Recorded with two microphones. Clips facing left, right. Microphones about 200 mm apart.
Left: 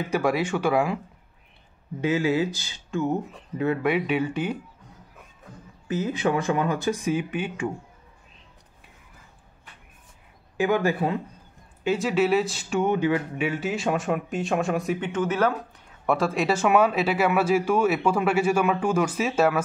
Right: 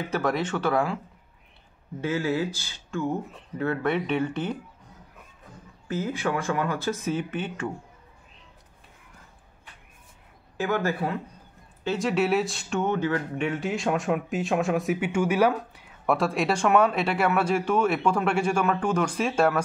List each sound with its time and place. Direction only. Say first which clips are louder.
0.1 s speech: left 3 dB; 10° left (ahead or behind)
2.0 s speech: left 3 dB; 15° left (ahead or behind)
5.9 s speech: left 3 dB; 20° left (ahead or behind)
10.6 s speech: left 4 dB; 15° left (ahead or behind)
13.5 s speech: left 1 dB; centre (ahead or behind)
16.1 s speech: left 1 dB; centre (ahead or behind)